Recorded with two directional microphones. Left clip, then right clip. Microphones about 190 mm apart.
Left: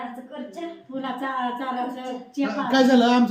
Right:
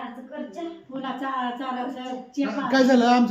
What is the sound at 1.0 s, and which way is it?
Speech, 20° left (ahead or behind).